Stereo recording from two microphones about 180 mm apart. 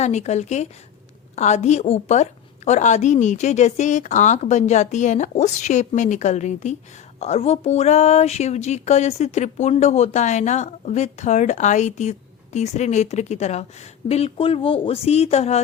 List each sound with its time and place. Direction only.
0.0 s a woman's voice: 40° left (ahead or behind)